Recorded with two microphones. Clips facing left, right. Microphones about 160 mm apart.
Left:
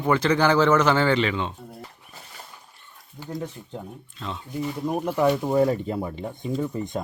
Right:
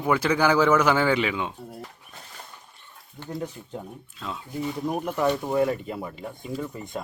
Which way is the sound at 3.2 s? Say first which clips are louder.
Even; centre (ahead or behind).